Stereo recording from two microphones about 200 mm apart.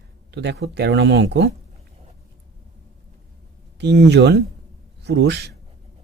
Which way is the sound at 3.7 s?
60° right (ahead or behind).